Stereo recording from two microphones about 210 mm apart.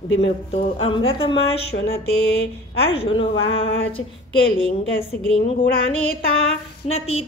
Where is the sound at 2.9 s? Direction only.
25° left (ahead or behind).